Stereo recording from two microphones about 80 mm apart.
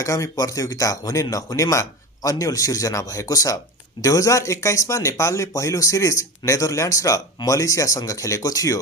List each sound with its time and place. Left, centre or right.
0.0 s speech: left